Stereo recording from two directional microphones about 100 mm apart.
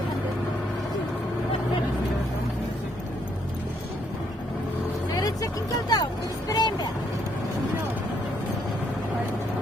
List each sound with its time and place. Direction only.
5.1 s vehicle: 40° left (ahead or behind)